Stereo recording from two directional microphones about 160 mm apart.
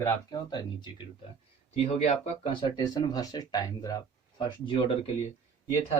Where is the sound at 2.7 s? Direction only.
25° left (ahead or behind).